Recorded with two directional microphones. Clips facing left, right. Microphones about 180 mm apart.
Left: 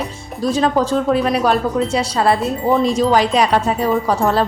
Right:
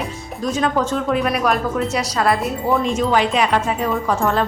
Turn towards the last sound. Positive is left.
turn(degrees=35)  # may be behind; listen again after turning